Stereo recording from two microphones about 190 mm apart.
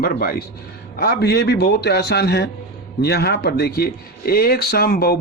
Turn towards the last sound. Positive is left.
turn(degrees=55)  # may be behind; listen again after turning